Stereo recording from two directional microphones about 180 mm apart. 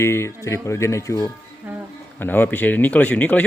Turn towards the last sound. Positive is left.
turn(degrees=10)  # may be behind; listen again after turning